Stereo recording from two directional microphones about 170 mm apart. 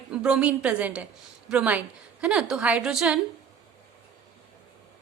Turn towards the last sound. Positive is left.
turn(degrees=-5)  # may be behind; listen again after turning